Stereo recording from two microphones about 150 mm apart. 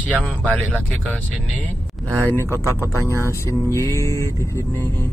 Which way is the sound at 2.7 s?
20° left (ahead or behind).